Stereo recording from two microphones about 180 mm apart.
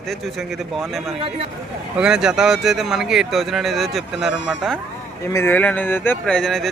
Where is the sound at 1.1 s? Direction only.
30° right (ahead or behind).